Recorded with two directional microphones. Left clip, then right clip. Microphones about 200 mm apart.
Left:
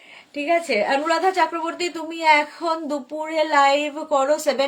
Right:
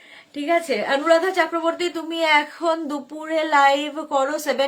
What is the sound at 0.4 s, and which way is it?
A woman's voice, 20° right (ahead or behind).